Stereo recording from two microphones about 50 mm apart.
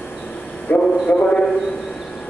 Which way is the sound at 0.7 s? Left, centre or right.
Left.